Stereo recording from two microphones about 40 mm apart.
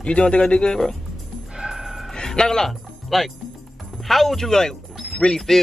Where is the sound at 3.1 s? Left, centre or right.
Centre.